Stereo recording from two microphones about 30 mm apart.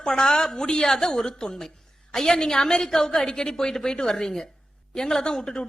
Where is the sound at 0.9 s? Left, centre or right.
Centre.